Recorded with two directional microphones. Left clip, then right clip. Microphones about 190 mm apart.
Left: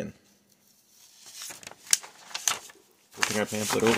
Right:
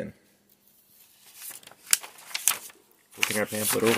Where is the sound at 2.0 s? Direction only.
10° left (ahead or behind).